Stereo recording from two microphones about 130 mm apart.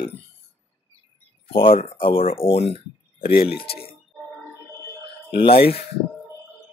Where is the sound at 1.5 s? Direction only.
45° left (ahead or behind).